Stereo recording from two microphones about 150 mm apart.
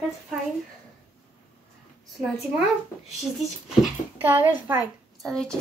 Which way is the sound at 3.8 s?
10° right (ahead or behind).